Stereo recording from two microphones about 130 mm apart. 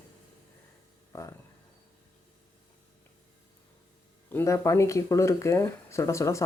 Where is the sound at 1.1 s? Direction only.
25° left (ahead or behind).